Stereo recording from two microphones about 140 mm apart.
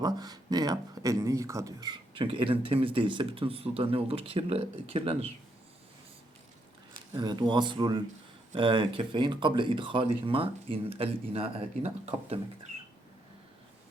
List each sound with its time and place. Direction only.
0.0 s speech: 30° right (ahead or behind); by 5.3 s 45° right (ahead or behind)
7.1 s speech: 30° right (ahead or behind); by 12.4 s 45° right (ahead or behind)